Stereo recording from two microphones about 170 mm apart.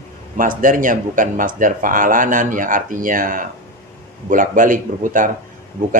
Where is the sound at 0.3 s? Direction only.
50° right (ahead or behind).